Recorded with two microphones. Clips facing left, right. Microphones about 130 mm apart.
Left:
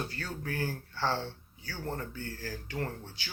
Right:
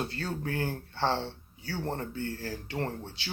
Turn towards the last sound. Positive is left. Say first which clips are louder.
# right 3 dB
turn(degrees=-25)  # may be behind; listen again after turning